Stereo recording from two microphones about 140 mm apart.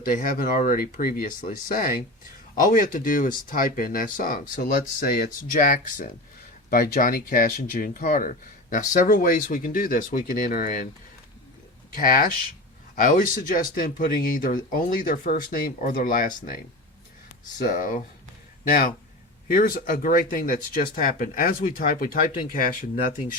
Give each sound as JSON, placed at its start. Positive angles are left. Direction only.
{"t": 0.0, "sound": "speech", "side_deg": 80}
{"t": 2.6, "sound": "speech", "side_deg": 75}
{"t": 6.7, "sound": "speech", "side_deg": 90}
{"t": 11.9, "sound": "speech", "side_deg": 85}
{"t": 17.7, "sound": "speech", "side_deg": 75}
{"t": 18.7, "sound": "speech", "side_deg": 90}